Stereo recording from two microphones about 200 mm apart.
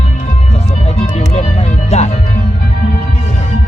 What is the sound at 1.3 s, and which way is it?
Music, 35° left (ahead or behind).